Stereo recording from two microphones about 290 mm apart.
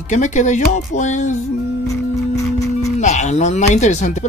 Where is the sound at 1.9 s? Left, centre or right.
Centre.